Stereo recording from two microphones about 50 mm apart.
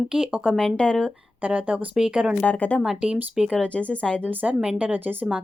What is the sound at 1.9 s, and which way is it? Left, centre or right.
Speech, centre.